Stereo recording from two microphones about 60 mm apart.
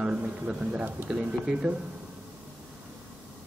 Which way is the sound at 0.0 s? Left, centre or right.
Right.